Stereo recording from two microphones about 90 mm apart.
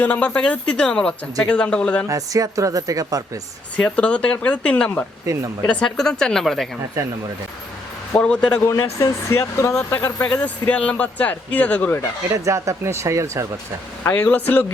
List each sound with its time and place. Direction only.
0.0 s speech: 15° left (ahead or behind)
2.0 s speech: 40° right (ahead or behind)
3.8 s speech: 10° left (ahead or behind)
5.2 s speech: 35° right (ahead or behind)
5.6 s speech: 5° left (ahead or behind)
8.1 s speech: 10° left (ahead or behind)
8.6 s speech: 30° left (ahead or behind); by 11.9 s 15° left (ahead or behind)
12.3 s speech: 35° right (ahead or behind)
14.0 s speech: 20° left (ahead or behind)